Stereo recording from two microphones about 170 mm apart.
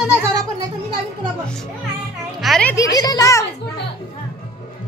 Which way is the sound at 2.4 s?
Centre (ahead or behind).